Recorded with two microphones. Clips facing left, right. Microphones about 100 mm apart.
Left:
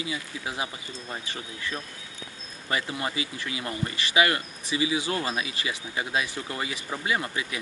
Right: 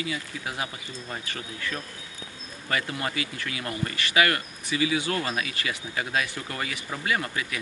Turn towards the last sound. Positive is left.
turn(degrees=25)  # may be behind; listen again after turning